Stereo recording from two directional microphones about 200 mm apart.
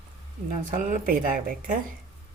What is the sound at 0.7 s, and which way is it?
Dishes, 40° right (ahead or behind).